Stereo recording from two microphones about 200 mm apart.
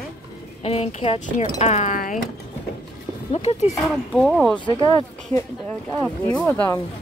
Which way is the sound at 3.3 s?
30° left (ahead or behind).